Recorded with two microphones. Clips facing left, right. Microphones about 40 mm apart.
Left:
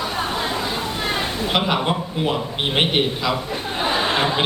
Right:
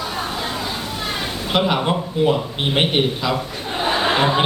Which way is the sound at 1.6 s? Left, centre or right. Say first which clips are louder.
Right 2 dB; centre.